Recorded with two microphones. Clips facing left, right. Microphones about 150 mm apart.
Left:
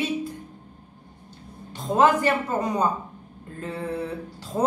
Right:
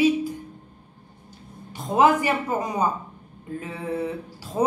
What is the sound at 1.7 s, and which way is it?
A woman's voice, 10° right (ahead or behind).